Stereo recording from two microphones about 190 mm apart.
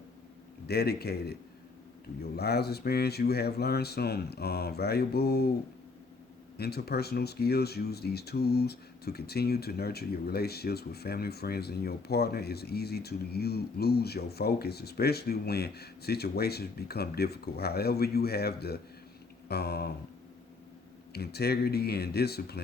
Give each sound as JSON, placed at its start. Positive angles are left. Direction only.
{"t": 0.7, "sound": "speech", "side_deg": 55}
{"t": 6.6, "sound": "speech", "side_deg": 55}
{"t": 21.1, "sound": "speech", "side_deg": 60}